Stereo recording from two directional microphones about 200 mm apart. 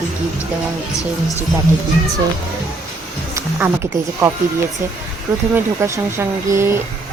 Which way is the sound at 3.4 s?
10° right (ahead or behind).